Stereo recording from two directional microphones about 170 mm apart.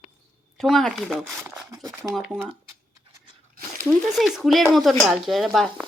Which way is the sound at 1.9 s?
10° right (ahead or behind).